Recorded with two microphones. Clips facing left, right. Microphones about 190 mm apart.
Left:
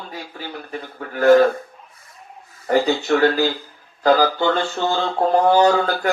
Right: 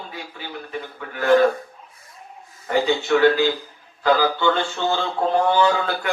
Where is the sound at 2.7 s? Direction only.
40° left (ahead or behind).